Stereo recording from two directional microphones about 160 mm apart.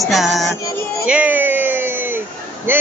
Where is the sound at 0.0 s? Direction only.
Centre (ahead or behind).